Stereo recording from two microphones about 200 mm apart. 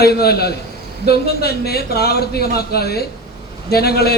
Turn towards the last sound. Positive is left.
turn(degrees=50)  # may be behind; listen again after turning